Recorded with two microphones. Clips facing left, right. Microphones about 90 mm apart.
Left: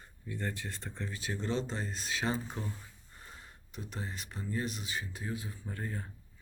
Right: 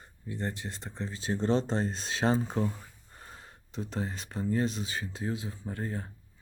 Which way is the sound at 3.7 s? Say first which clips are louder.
Right 7 dB; 30° right (ahead or behind).